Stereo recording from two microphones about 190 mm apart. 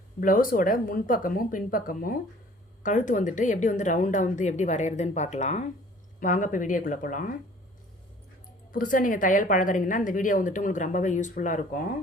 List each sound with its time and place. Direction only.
0.2 s a woman's voice: 45° left (ahead or behind)
8.7 s a woman's voice: 45° left (ahead or behind)